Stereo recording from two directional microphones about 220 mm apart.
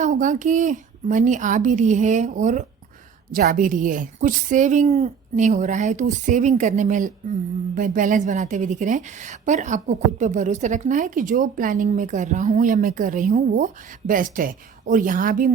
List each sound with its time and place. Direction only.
0.0 s a woman's voice: 35° right (ahead or behind)